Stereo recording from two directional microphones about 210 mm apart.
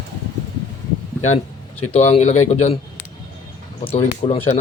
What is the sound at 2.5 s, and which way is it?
Speech, 30° left (ahead or behind).